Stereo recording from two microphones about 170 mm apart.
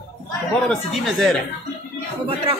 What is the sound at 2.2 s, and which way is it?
Speech, 35° right (ahead or behind).